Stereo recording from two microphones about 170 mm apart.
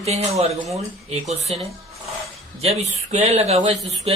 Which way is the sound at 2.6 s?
40° right (ahead or behind).